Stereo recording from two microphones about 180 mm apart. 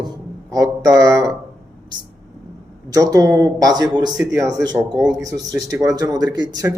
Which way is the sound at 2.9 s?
20° right (ahead or behind).